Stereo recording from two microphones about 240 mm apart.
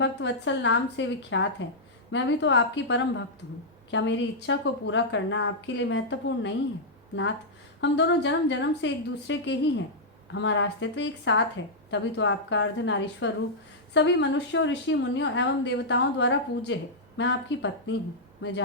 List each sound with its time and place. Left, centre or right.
0.0 s a woman's voice: left
7.8 s a woman's voice: left